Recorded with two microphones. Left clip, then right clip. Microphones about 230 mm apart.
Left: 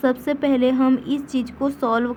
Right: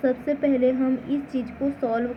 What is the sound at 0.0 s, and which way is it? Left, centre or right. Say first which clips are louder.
A woman's voice: left 2 dB; left.